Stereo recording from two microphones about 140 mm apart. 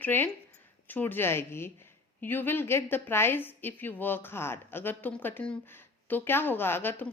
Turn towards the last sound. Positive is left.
turn(degrees=15)  # may be behind; listen again after turning